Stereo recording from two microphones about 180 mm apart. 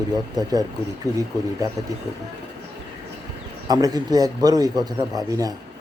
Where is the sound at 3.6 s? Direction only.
20° right (ahead or behind).